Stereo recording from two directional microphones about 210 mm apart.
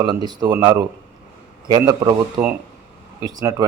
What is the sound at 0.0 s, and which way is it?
Speech, 20° right (ahead or behind).